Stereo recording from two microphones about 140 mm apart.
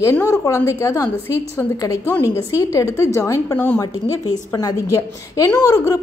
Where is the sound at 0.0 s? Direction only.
20° left (ahead or behind).